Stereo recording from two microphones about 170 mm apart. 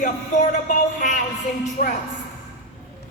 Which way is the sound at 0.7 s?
50° left (ahead or behind).